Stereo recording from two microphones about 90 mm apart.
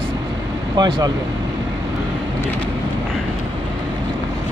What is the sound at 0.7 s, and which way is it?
Speech, 60° right (ahead or behind).